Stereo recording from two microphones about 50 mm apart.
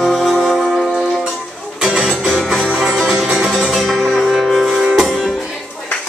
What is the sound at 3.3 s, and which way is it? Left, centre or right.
Music, centre.